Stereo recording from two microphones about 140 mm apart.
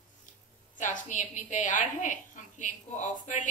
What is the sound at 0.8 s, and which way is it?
A woman's voice, 65° left (ahead or behind).